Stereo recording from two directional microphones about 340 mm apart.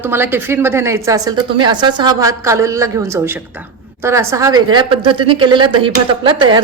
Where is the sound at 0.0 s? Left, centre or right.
Centre.